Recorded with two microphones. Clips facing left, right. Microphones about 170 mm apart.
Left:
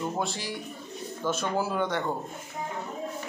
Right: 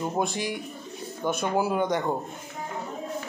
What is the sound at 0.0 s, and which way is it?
A man's voice, 15° right (ahead or behind).